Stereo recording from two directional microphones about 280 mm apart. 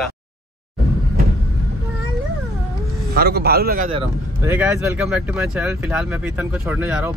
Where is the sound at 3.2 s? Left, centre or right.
Right.